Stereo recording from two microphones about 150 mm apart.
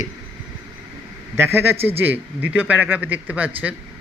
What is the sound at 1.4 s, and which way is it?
A man's voice, 15° right (ahead or behind).